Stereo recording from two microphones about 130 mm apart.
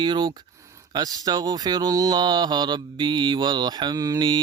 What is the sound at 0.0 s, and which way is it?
Mantra, 35° right (ahead or behind).